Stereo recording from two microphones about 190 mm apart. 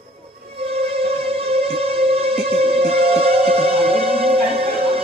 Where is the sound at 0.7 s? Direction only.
30° right (ahead or behind).